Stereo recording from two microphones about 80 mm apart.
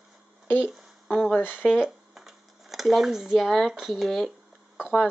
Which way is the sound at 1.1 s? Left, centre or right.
Centre.